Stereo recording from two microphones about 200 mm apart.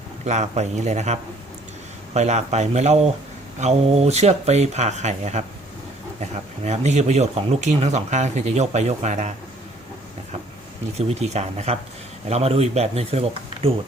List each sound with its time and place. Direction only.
0.3 s speech: 35° right (ahead or behind)
6.7 s speech: 35° right (ahead or behind)
10.9 s speech: 35° right (ahead or behind)